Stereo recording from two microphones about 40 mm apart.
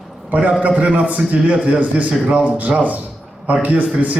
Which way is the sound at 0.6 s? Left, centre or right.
Right.